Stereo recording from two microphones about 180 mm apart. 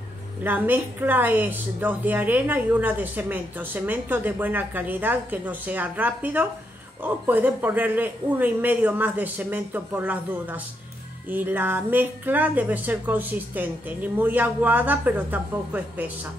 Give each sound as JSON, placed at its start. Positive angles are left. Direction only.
{"t": 0.4, "sound": "a woman's voice", "side_deg": -10}